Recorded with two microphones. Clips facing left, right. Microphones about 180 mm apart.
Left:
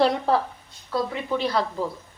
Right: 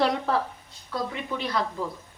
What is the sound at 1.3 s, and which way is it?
Speech, 30° left (ahead or behind).